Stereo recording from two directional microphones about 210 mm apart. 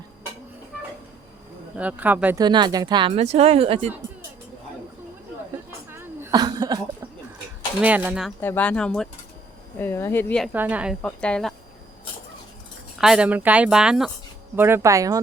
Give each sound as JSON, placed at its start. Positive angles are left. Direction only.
{"t": 1.7, "sound": "speech", "side_deg": -5}
{"t": 2.4, "sound": "speech", "side_deg": -20}
{"t": 5.9, "sound": "cough", "side_deg": -10}
{"t": 7.8, "sound": "speech", "side_deg": -5}
{"t": 8.4, "sound": "speech", "side_deg": 10}
{"t": 10.5, "sound": "speech", "side_deg": -5}
{"t": 11.0, "sound": "speech", "side_deg": 5}
{"t": 13.0, "sound": "speech", "side_deg": -5}